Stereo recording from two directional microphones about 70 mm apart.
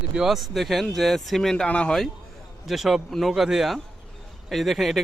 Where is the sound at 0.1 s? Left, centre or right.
Centre.